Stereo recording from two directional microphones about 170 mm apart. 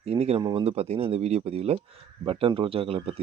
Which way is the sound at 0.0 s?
35° right (ahead or behind).